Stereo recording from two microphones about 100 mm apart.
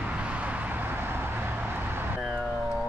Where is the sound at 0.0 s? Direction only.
15° right (ahead or behind).